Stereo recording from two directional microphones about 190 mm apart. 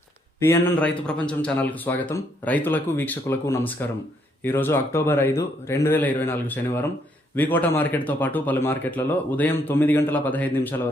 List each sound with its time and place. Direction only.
0.3 s a man's voice: 10° left (ahead or behind)